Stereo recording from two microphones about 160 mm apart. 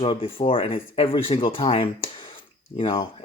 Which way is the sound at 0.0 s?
35° left (ahead or behind).